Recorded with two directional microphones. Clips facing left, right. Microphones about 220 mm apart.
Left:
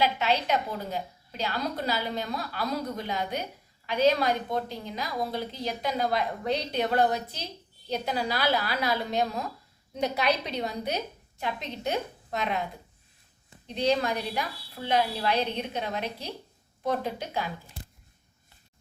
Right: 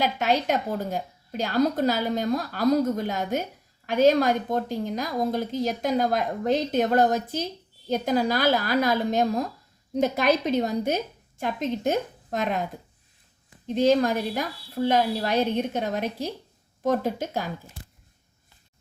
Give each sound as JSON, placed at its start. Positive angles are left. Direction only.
{"t": 0.0, "sound": "a woman's voice", "side_deg": -50}
{"t": 13.7, "sound": "a woman's voice", "side_deg": -45}